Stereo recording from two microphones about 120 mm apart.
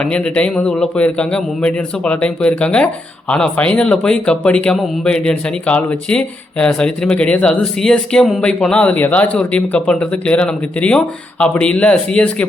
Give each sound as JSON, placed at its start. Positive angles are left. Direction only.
{"t": 0.0, "sound": "a man's voice", "side_deg": 10}